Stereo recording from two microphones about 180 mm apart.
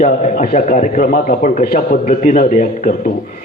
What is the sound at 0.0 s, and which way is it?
A man's voice, 45° left (ahead or behind).